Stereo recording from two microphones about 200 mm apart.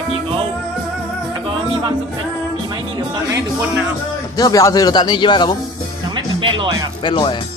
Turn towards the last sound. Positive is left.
turn(degrees=25)  # may be behind; listen again after turning